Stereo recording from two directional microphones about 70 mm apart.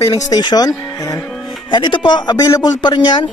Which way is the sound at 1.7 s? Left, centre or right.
Left.